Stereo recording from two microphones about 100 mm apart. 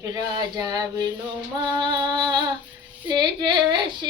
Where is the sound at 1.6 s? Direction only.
45° right (ahead or behind).